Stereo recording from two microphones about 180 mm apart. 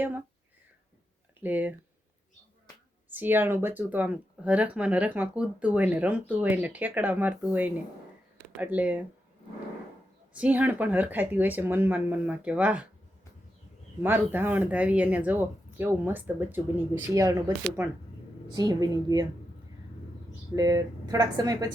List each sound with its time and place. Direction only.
1.4 s speech: 10° right (ahead or behind)
3.1 s speech: 10° right (ahead or behind)
10.3 s speech: 5° right (ahead or behind)
14.0 s speech: 10° right (ahead or behind)
18.4 s speech: 20° right (ahead or behind)
20.6 s speech: 20° right (ahead or behind)